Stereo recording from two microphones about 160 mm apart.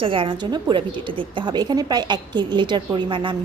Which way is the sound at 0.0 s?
35° right (ahead or behind).